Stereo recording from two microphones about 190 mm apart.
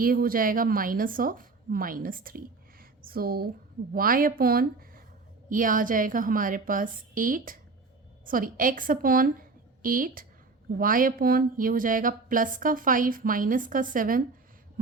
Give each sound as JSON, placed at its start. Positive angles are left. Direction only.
{"t": 0.0, "sound": "a woman's voice", "side_deg": -50}